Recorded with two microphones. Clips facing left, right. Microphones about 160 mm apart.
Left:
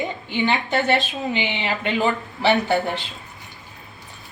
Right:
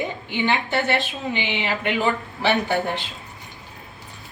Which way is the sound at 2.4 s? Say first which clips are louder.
Left 4 dB; 15° left (ahead or behind).